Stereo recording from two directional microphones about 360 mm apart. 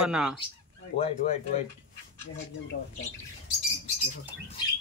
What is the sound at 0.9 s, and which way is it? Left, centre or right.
Speech, centre.